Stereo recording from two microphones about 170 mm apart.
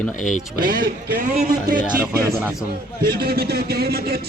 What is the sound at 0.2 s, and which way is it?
Speech, 50° left (ahead or behind).